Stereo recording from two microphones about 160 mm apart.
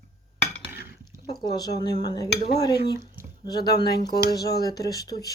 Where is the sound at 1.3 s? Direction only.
25° left (ahead or behind).